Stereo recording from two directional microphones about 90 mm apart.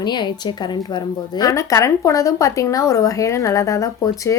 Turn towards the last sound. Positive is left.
turn(degrees=35)  # may be behind; listen again after turning